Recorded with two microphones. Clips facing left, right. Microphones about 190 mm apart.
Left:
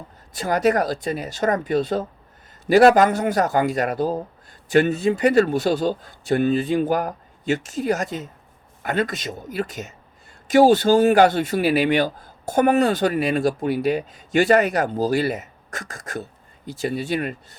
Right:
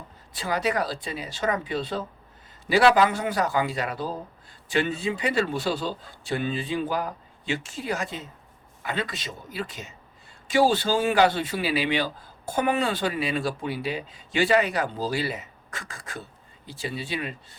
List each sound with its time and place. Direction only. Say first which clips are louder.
0.3 s speech: left 7 dB; 45° left (ahead or behind)